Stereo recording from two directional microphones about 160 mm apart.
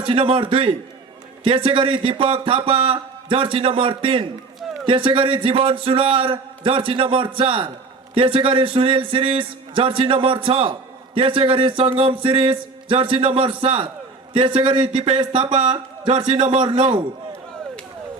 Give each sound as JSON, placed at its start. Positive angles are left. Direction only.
{"t": 0.0, "sound": "a man's voice", "side_deg": -35}